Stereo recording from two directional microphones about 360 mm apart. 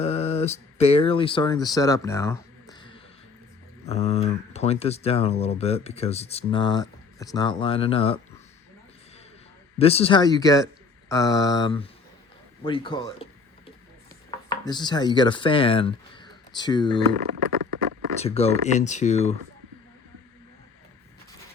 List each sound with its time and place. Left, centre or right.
0.0 s speech: centre
9.7 s speech: centre
14.3 s chopping: centre
18.2 s speech: centre